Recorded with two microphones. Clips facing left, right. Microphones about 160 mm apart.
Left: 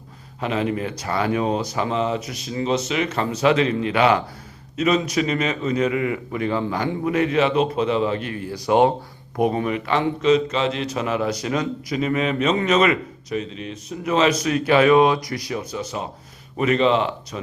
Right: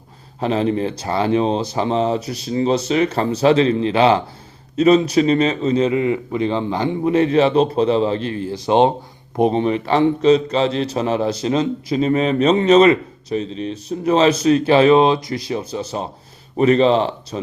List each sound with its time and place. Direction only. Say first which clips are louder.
0.3 s a man's voice: right 5 dB; 35° right (ahead or behind)